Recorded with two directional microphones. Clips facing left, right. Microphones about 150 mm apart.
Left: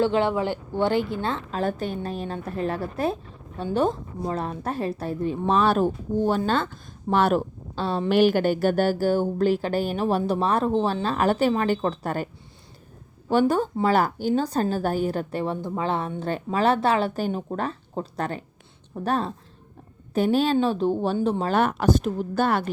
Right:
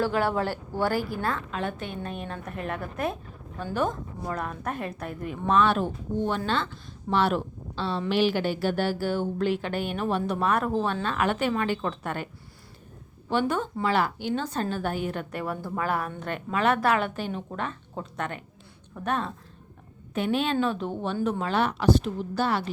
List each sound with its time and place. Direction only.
0.0 s a woman's voice: 25° left (ahead or behind)
13.3 s a woman's voice: 35° left (ahead or behind)
21.5 s a woman's voice: 50° left (ahead or behind)